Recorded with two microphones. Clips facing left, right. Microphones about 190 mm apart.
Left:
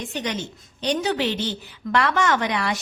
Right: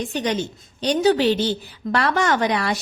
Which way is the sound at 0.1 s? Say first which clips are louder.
Right 5 dB; 35° right (ahead or behind).